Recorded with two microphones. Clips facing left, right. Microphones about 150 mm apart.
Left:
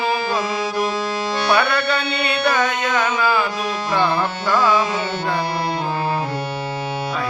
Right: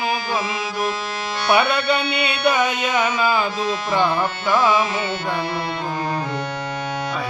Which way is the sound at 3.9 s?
15° right (ahead or behind).